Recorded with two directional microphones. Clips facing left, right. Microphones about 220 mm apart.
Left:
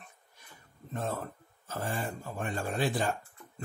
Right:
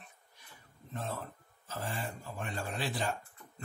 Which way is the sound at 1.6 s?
50° left (ahead or behind).